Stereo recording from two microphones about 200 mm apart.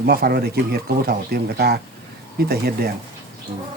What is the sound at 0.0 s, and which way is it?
Speech, 50° right (ahead or behind).